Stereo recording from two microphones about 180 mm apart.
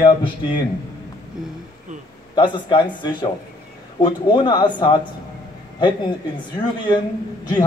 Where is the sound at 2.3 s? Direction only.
25° left (ahead or behind).